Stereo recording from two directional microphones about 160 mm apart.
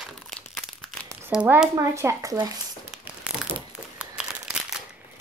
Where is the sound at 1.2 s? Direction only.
10° right (ahead or behind).